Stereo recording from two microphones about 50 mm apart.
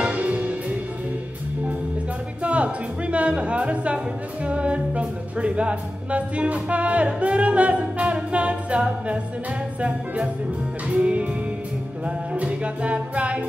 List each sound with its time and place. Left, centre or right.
0.0 s music: right
2.4 s speech: right
4.5 s music: right
12.4 s music: right